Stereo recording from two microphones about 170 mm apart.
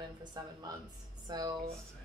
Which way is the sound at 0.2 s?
25° right (ahead or behind).